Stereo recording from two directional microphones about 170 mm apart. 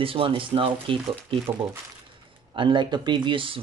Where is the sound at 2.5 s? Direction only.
30° right (ahead or behind).